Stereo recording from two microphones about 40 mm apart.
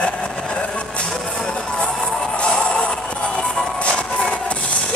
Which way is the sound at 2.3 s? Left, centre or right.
Left.